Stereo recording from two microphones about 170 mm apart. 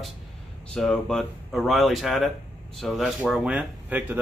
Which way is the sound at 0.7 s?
5° left (ahead or behind).